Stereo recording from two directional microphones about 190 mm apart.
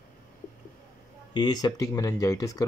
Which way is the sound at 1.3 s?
25° left (ahead or behind).